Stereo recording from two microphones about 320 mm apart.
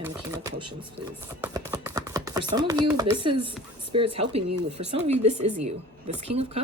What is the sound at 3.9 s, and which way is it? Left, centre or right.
Speech, centre.